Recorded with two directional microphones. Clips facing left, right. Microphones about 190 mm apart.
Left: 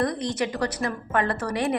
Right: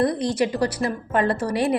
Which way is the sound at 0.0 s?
30° right (ahead or behind).